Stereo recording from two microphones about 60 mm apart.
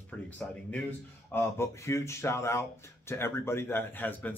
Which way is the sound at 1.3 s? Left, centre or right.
Left.